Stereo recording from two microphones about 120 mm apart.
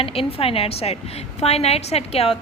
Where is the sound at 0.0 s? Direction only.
50° left (ahead or behind).